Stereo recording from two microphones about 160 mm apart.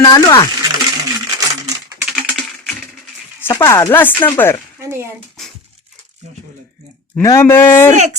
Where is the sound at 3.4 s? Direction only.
15° left (ahead or behind).